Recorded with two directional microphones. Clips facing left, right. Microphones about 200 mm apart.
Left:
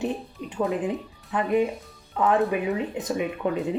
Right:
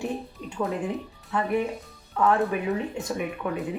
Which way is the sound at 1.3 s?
20° left (ahead or behind).